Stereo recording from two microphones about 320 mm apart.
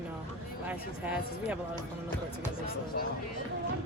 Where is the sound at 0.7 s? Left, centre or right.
Centre.